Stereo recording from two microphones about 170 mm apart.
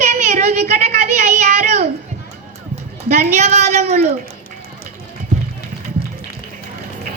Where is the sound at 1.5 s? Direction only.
65° right (ahead or behind).